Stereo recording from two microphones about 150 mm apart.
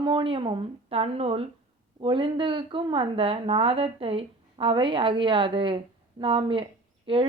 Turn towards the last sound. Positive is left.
turn(degrees=-35)  # may be behind; listen again after turning